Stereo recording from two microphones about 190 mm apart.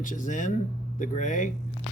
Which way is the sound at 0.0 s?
45° left (ahead or behind).